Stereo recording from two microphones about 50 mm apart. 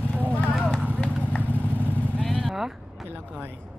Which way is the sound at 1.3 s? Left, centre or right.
Left.